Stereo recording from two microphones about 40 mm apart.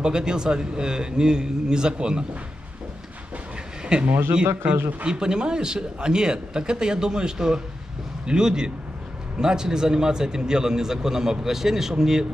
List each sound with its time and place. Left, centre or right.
0.0 s a man's voice: right
3.8 s a man's voice: right